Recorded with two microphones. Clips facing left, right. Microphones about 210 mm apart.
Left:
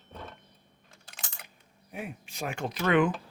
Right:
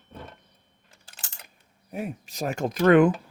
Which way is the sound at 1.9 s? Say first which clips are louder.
Right 6 dB; 40° right (ahead or behind).